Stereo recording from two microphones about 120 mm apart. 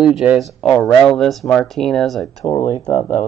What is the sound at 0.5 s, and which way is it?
Speech, 10° left (ahead or behind).